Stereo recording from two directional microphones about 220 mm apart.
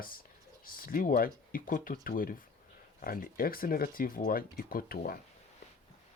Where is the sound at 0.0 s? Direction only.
40° left (ahead or behind).